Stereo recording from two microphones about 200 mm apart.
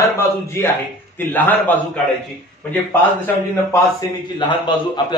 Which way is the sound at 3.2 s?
15° left (ahead or behind).